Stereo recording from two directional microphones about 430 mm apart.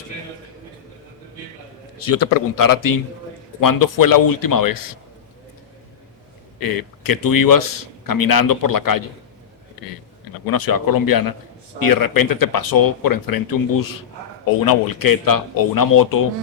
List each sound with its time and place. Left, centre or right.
2.0 s a man's voice: left
6.6 s a man's voice: left
10.4 s a man's voice: left